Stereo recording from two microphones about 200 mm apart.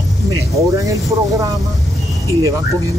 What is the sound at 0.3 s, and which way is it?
Vehicle, 15° right (ahead or behind).